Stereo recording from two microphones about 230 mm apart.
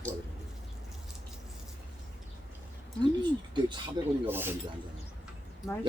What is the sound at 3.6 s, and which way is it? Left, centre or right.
Speech, centre.